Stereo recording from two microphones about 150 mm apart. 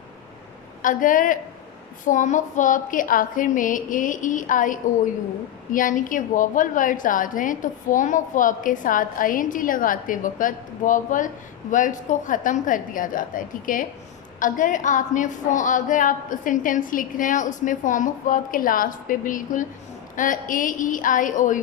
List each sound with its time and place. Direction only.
0.8 s a woman's voice: 60° left (ahead or behind)